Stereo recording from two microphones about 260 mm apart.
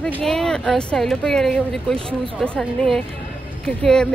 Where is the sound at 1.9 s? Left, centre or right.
Right.